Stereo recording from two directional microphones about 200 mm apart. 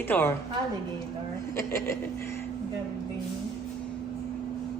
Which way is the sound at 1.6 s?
15° left (ahead or behind).